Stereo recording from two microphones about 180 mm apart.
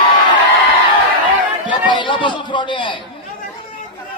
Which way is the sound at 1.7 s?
25° left (ahead or behind).